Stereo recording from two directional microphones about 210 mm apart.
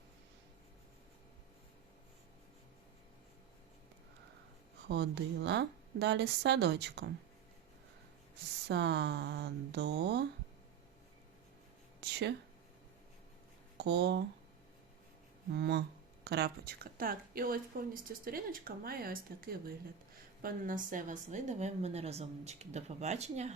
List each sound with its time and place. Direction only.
4.9 s speech: 55° right (ahead or behind)
8.6 s speech: 55° right (ahead or behind)
11.9 s a sound: 55° right (ahead or behind)
13.7 s speech: 50° right (ahead or behind)
15.5 s a woman's voice: 55° right (ahead or behind); by 23.6 s 30° right (ahead or behind)